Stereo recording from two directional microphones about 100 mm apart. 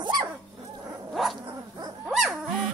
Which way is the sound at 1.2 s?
Centre (ahead or behind).